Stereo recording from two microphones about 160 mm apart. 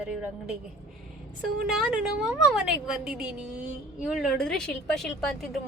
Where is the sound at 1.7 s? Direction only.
5° right (ahead or behind).